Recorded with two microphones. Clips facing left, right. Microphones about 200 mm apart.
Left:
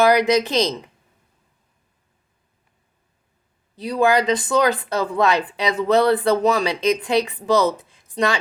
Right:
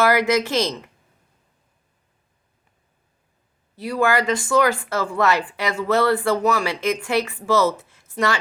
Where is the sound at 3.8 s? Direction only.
20° left (ahead or behind).